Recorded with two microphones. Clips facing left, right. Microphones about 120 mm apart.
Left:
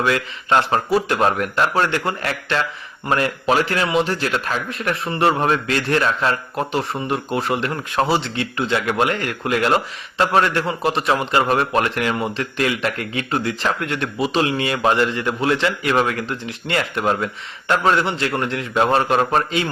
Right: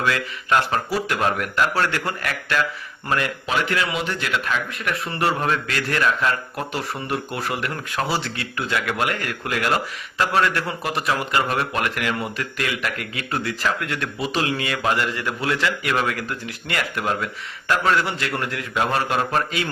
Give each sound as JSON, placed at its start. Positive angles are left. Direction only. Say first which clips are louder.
{"t": 0.0, "sound": "speech", "louder": "left 3 dB", "side_deg": 30}